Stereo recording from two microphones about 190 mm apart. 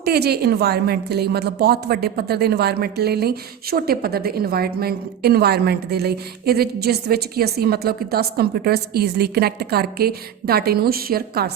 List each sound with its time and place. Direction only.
0.0 s a woman's voice: 55° right (ahead or behind)